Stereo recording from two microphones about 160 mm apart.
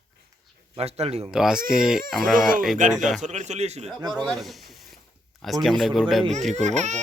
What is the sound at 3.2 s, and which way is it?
Speech, 50° right (ahead or behind).